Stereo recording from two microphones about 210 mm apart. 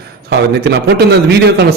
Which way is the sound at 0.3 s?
50° right (ahead or behind).